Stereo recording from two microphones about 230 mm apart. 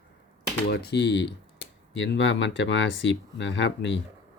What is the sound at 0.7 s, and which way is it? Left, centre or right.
Speech, left.